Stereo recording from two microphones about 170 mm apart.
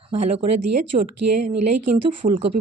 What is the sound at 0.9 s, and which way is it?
Speech, 40° right (ahead or behind).